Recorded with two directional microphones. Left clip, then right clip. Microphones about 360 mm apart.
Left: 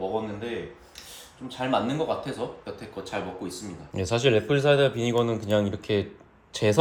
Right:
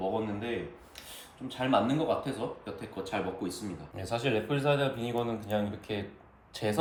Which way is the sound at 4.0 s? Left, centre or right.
Centre.